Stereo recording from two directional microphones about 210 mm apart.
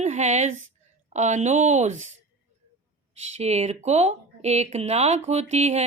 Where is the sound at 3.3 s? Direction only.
30° right (ahead or behind).